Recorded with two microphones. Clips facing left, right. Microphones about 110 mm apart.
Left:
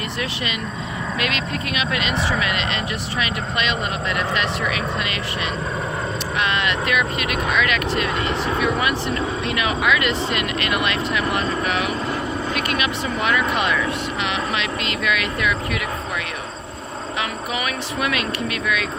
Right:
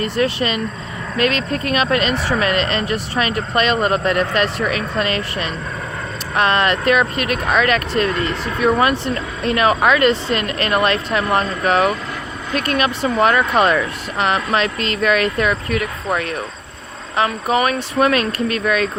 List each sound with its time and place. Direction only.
0.0 s speech: 35° right (ahead or behind)